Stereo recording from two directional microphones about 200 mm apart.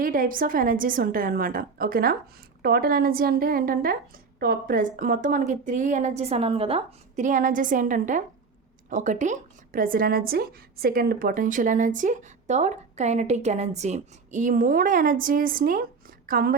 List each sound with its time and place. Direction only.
0.0 s a woman's voice: 45° right (ahead or behind)